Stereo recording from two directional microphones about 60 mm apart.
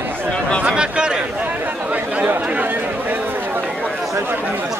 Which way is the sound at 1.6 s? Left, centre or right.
Right.